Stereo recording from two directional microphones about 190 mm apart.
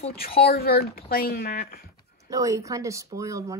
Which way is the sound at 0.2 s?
50° left (ahead or behind).